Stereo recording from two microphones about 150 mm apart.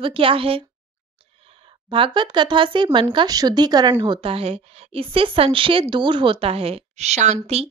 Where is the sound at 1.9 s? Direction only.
35° right (ahead or behind).